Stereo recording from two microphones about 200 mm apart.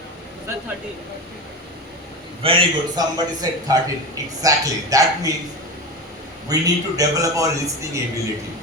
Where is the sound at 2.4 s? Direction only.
25° right (ahead or behind).